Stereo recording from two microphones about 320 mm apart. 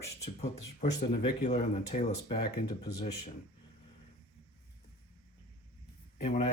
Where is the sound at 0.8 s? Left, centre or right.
Left.